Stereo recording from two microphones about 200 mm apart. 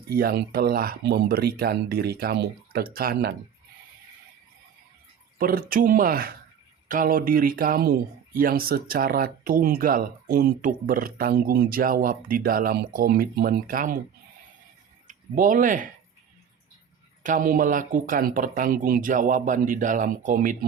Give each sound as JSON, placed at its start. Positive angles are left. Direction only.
{"t": 0.1, "sound": "speech", "side_deg": -50}
{"t": 5.4, "sound": "speech", "side_deg": -45}
{"t": 15.0, "sound": "speech", "side_deg": -40}
{"t": 17.2, "sound": "speech", "side_deg": -40}